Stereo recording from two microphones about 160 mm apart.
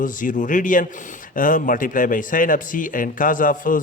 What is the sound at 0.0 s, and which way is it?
A man's voice, 55° left (ahead or behind).